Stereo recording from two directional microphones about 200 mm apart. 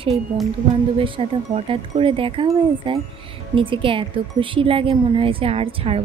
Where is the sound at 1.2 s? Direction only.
25° right (ahead or behind).